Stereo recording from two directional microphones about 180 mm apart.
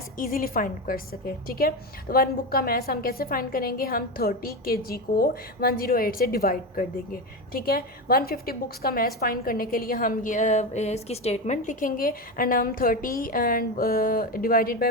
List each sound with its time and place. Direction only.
0.2 s a woman's voice: 55° left (ahead or behind)